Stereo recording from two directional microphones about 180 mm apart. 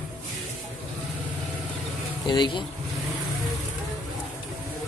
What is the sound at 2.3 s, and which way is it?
Speech, 25° left (ahead or behind).